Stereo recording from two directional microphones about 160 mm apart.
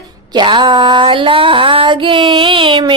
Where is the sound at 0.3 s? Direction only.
30° right (ahead or behind).